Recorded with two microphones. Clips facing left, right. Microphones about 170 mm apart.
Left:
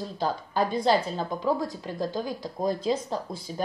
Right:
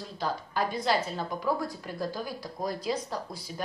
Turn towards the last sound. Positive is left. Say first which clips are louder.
# left 4 dB
turn(degrees=25)  # may be behind; listen again after turning